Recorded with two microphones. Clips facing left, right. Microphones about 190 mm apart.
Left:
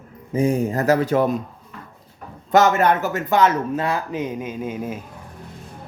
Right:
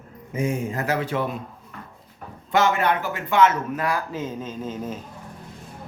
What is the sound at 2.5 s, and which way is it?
Speech, 40° left (ahead or behind).